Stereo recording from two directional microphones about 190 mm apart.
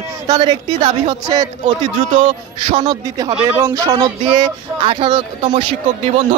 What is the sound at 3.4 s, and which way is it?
A man's voice, 10° right (ahead or behind).